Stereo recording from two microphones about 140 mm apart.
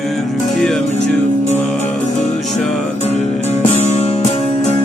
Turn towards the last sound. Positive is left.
turn(degrees=50)  # may be behind; listen again after turning